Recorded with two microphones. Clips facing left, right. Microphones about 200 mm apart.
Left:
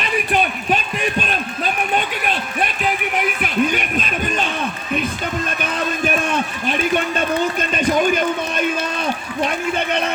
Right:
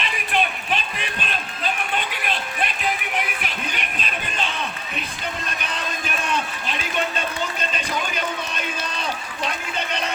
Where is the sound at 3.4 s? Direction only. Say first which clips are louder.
Left 11 dB; 50° left (ahead or behind).